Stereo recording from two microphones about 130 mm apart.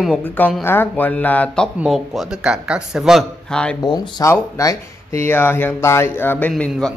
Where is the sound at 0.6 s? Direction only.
15° left (ahead or behind).